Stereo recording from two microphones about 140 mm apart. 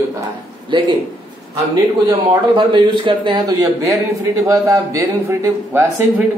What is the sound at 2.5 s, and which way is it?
A man's voice, 35° right (ahead or behind).